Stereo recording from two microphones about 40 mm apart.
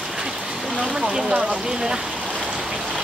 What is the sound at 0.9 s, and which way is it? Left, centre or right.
Speech, centre.